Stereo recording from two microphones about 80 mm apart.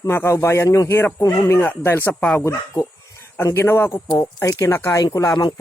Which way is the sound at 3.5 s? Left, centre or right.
Left.